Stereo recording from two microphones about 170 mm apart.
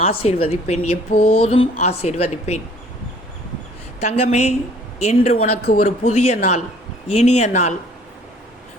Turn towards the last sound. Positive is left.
turn(degrees=40)  # may be behind; listen again after turning